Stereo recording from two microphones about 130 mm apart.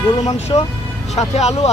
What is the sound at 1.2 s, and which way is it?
Speech, 55° left (ahead or behind).